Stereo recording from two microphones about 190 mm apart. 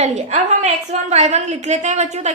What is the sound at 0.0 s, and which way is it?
A woman's voice, 35° right (ahead or behind).